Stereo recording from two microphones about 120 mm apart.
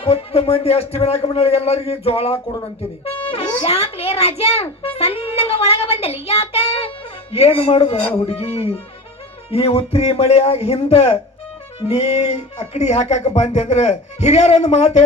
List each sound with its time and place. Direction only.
0.0 s a man's voice: 55° left (ahead or behind)